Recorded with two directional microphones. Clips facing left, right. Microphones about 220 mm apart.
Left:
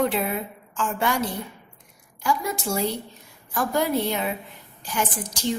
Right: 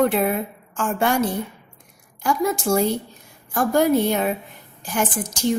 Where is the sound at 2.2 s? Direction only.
50° right (ahead or behind).